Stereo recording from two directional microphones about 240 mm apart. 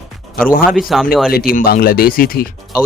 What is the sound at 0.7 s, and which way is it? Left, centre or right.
Speech, centre.